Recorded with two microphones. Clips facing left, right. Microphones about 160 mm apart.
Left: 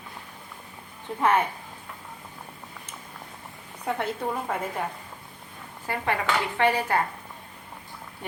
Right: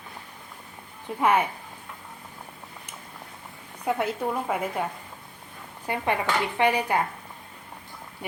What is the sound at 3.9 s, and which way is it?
Speech, 10° right (ahead or behind).